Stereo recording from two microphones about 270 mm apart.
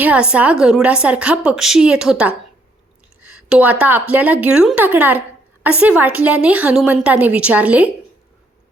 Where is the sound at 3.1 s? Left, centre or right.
Centre.